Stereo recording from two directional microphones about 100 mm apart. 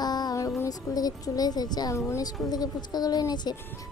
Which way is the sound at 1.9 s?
30° left (ahead or behind).